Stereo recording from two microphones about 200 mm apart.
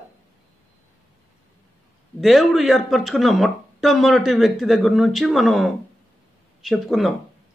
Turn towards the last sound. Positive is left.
turn(degrees=0)  # may be behind; listen again after turning